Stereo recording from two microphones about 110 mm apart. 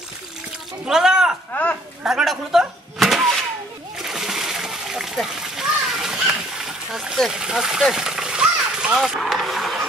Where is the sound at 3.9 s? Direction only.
5° right (ahead or behind).